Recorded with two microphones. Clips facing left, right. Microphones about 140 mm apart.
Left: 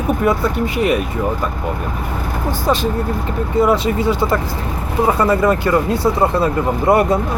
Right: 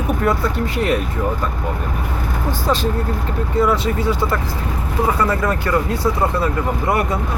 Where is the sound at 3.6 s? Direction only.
20° left (ahead or behind).